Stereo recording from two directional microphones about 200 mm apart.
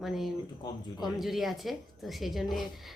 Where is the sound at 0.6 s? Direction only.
20° left (ahead or behind).